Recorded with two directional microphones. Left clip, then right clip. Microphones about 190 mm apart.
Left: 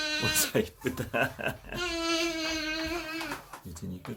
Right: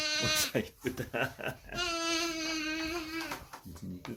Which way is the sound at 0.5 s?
Centre (ahead or behind).